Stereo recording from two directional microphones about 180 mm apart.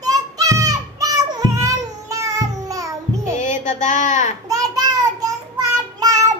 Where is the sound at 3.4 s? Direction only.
45° left (ahead or behind).